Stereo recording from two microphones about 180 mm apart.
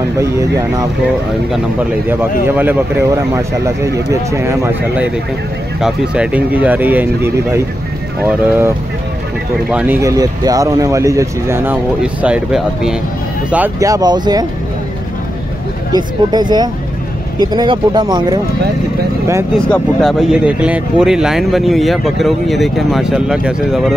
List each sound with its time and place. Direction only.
0.2 s speech: 15° right (ahead or behind)
2.4 s speech: 10° right (ahead or behind)
15.9 s speech: 25° right (ahead or behind)
19.6 s speech: 5° left (ahead or behind)